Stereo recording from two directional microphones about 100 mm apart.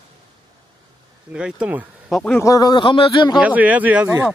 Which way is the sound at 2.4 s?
35° left (ahead or behind).